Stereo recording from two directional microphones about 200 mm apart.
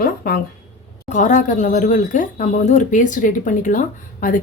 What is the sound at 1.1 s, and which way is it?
Speech, 40° left (ahead or behind).